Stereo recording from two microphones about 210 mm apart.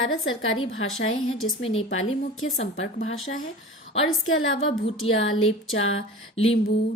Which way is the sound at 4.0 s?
70° left (ahead or behind).